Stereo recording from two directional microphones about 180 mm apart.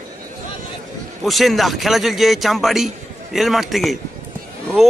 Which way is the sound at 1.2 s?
Centre (ahead or behind).